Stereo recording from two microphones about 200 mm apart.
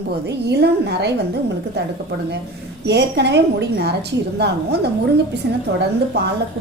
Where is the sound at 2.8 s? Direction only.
55° right (ahead or behind).